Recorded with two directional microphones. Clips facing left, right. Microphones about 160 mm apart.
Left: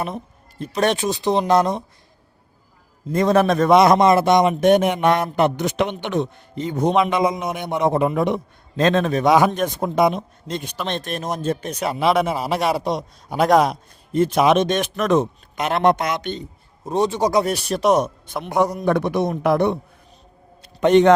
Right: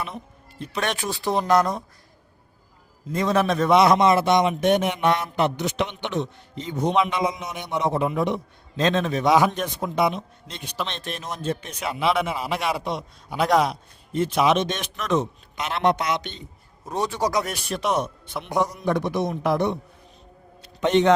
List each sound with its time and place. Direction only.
0.6 s speech: 40° left (ahead or behind)
0.9 s speech: 20° left (ahead or behind)
3.1 s a man's voice: 50° left (ahead or behind)
16.8 s a man's voice: 25° left (ahead or behind); by 19.8 s 60° left (ahead or behind)
20.6 s a sound: 50° left (ahead or behind)